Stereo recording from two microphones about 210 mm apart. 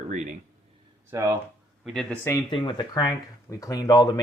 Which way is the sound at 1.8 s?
Centre (ahead or behind).